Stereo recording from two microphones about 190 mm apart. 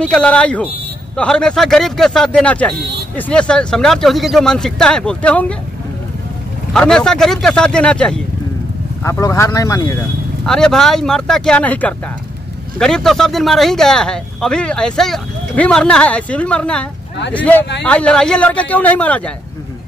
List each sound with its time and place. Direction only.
0.1 s speech: 5° left (ahead or behind)
6.7 s speech: 5° left (ahead or behind)
9.0 s a man's voice: 15° left (ahead or behind)
10.4 s a man's voice: 5° left (ahead or behind)